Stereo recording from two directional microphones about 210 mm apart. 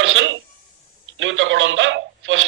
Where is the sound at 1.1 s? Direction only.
65° right (ahead or behind).